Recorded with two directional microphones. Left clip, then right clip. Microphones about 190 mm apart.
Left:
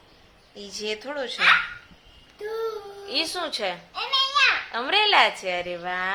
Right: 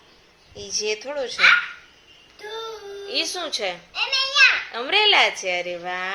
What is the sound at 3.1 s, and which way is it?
A woman's voice, 5° left (ahead or behind).